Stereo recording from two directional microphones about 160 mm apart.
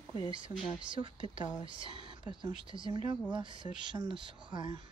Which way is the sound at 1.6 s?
30° right (ahead or behind).